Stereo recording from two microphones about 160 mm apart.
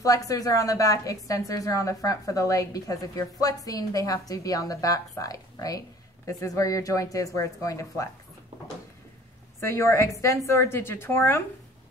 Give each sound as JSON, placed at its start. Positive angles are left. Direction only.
{"t": 0.0, "sound": "a woman's voice", "side_deg": 20}
{"t": 9.6, "sound": "a woman's voice", "side_deg": 15}